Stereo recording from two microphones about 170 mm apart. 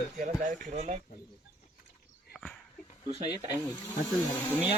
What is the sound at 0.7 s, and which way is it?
Speech, 40° right (ahead or behind).